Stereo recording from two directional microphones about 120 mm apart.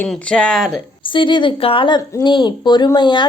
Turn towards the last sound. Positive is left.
turn(degrees=40)  # may be behind; listen again after turning